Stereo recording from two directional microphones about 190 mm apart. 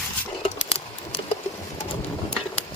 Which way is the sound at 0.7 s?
30° left (ahead or behind).